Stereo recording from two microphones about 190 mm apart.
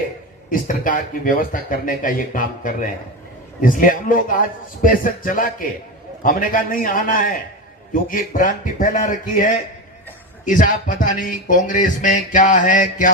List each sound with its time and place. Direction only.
0.5 s speech: 45° left (ahead or behind)